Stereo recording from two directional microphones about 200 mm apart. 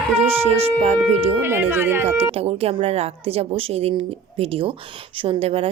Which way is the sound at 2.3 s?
30° right (ahead or behind).